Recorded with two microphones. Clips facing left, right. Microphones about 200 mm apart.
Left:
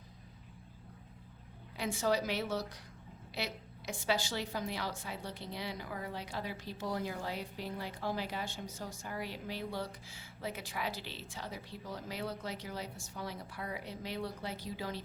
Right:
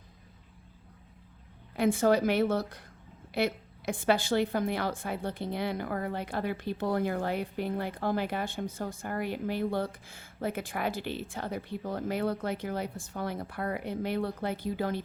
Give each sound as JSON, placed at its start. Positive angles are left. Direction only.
{"t": 1.7, "sound": "a woman's voice", "side_deg": -55}